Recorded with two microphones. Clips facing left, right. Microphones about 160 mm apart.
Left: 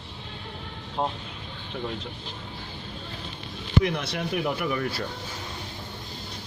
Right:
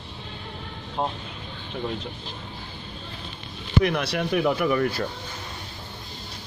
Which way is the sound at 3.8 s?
75° right (ahead or behind).